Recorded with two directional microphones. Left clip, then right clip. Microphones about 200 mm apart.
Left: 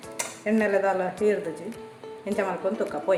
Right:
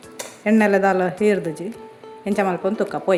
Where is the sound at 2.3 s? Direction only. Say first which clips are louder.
Right 6 dB; 50° right (ahead or behind).